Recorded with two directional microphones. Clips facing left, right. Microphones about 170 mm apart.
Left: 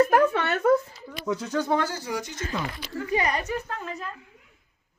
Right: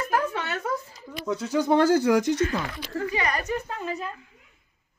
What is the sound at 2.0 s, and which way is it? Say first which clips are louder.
Speech: right 11 dB; 90° right.